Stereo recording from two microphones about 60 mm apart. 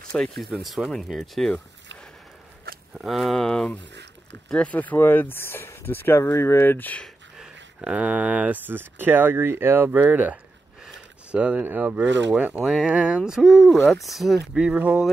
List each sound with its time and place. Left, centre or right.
0.0 s a sound: centre
0.4 s speech: centre
3.1 s speech: centre
3.3 s speech: centre; by 6.9 s left
7.3 s speech: centre; by 9.8 s right
9.8 s speech: right
12.6 s speech: centre
14.8 s speech: right